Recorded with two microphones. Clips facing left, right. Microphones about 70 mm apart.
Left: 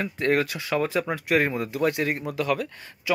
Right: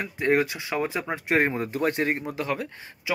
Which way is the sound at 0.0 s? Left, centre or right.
Centre.